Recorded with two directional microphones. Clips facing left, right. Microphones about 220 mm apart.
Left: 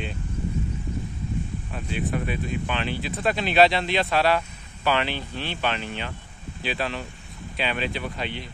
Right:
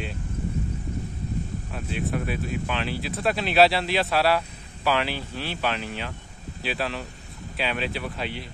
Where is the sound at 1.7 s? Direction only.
Centre (ahead or behind).